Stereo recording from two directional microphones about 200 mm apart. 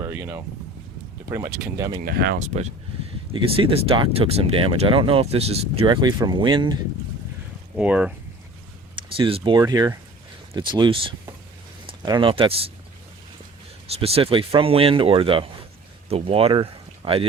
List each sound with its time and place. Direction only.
0.0 s speech: 10° right (ahead or behind)
2.0 s speech: 50° right (ahead or behind)
3.3 s speech: 25° right (ahead or behind)
7.8 s speech: 5° right (ahead or behind)
9.1 s speech: 25° right (ahead or behind)
13.8 s speech: 30° right (ahead or behind)